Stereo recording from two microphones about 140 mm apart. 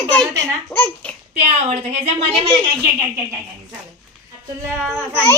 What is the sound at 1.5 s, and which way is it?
A woman's voice, 50° right (ahead or behind).